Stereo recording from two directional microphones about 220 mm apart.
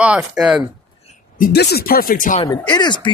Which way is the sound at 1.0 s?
40° left (ahead or behind).